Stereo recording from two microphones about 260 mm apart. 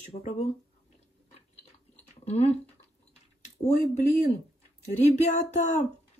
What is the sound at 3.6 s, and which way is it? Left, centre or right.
Speech, left.